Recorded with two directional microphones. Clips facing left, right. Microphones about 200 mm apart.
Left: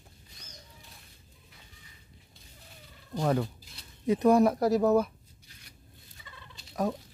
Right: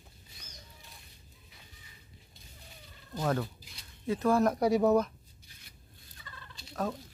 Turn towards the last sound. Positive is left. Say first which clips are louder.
# left 4 dB
turn(degrees=15)  # may be behind; listen again after turning